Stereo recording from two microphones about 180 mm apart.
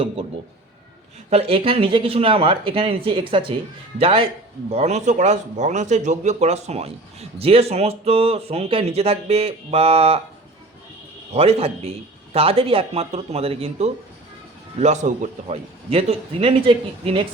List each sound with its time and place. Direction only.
1.3 s speech: 35° right (ahead or behind)
11.3 s speech: 35° right (ahead or behind)